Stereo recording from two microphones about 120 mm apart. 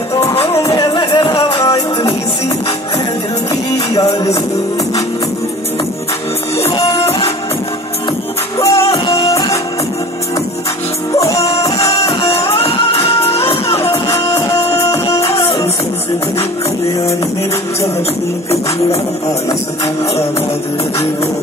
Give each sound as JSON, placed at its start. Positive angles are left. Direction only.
{"t": 0.7, "sound": "music", "side_deg": 50}
{"t": 1.5, "sound": "music", "side_deg": 25}
{"t": 6.9, "sound": "music", "side_deg": 60}
{"t": 8.5, "sound": "music", "side_deg": 25}
{"t": 8.9, "sound": "music", "side_deg": 35}
{"t": 9.3, "sound": "music", "side_deg": 25}
{"t": 11.1, "sound": "music", "side_deg": 25}
{"t": 12.1, "sound": "music", "side_deg": 60}
{"t": 13.4, "sound": "music", "side_deg": 25}